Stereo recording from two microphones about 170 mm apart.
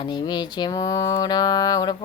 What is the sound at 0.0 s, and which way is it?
Speech, 25° left (ahead or behind).